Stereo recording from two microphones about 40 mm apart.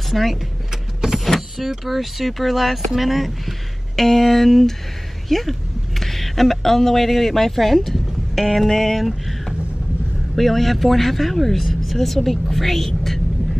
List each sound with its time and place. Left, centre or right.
0.1 s speech: centre
1.6 s a woman's voice: centre
8.5 s a sound: centre
10.3 s speech: centre